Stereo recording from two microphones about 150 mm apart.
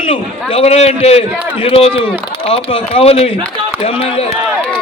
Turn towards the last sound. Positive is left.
turn(degrees=40)  # may be behind; listen again after turning